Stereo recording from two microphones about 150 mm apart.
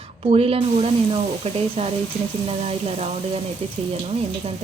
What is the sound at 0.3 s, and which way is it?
A woman's voice, 40° right (ahead or behind).